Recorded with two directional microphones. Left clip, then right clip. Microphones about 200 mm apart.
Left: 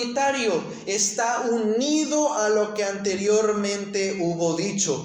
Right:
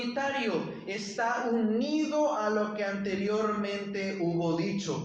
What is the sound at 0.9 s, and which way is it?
A man's voice, 40° left (ahead or behind).